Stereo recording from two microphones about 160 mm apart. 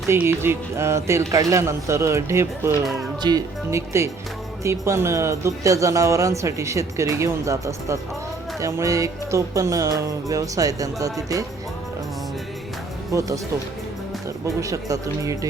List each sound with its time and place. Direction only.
0.1 s speech: 15° right (ahead or behind)
13.1 s speech: 20° right (ahead or behind)
14.4 s speech: 20° right (ahead or behind)